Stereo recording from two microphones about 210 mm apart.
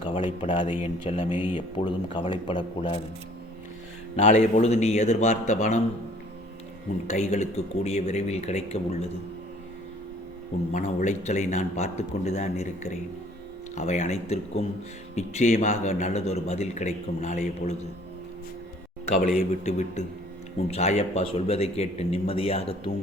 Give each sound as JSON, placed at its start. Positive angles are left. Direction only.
{"t": 0.0, "sound": "speech", "side_deg": 25}
{"t": 4.2, "sound": "a man's voice", "side_deg": 35}
{"t": 7.1, "sound": "a man's voice", "side_deg": 35}
{"t": 10.7, "sound": "a man's voice", "side_deg": 35}
{"t": 19.4, "sound": "a man's voice", "side_deg": 35}